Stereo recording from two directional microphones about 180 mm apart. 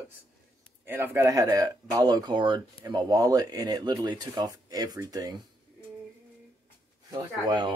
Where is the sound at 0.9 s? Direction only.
15° right (ahead or behind).